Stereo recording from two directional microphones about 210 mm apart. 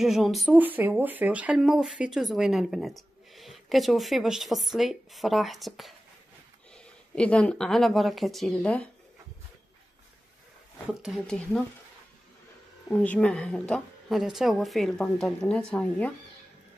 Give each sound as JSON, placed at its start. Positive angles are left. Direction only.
{"t": 0.0, "sound": "speech", "side_deg": 0}
{"t": 7.2, "sound": "speech", "side_deg": 5}
{"t": 10.9, "sound": "speech", "side_deg": 0}
{"t": 12.9, "sound": "speech", "side_deg": 5}